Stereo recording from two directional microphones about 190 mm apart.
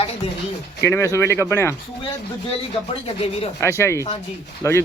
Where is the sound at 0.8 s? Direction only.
15° left (ahead or behind).